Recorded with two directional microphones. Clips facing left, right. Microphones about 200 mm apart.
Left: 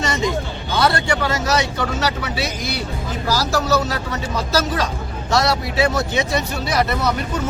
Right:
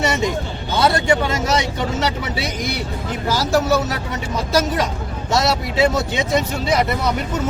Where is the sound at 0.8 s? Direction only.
20° right (ahead or behind).